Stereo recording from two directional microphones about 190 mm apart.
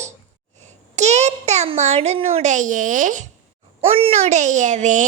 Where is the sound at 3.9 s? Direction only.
30° right (ahead or behind).